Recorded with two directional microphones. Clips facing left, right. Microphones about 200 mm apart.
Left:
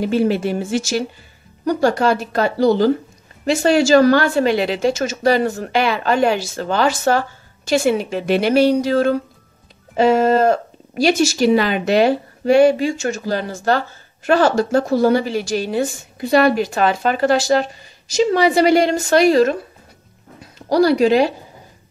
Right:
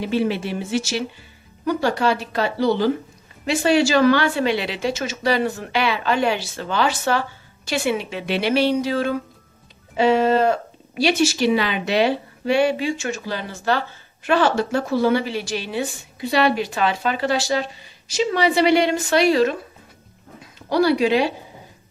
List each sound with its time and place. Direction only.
0.0 s speech: 45° left (ahead or behind)
20.7 s speech: 40° left (ahead or behind)